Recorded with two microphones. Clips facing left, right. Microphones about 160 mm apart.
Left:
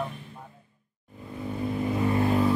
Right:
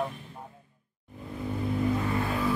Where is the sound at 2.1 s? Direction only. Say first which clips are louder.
Left 5 dB; 30° left (ahead or behind).